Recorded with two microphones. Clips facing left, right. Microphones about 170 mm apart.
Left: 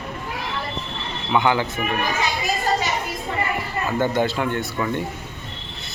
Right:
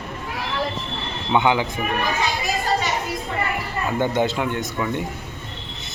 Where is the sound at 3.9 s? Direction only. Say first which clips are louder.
Even; 15° right (ahead or behind).